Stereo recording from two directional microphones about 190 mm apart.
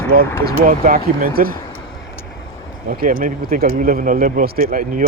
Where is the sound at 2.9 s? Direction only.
45° right (ahead or behind).